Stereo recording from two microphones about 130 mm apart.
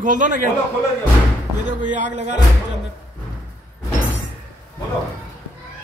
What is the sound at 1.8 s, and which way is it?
Speech, 70° right (ahead or behind).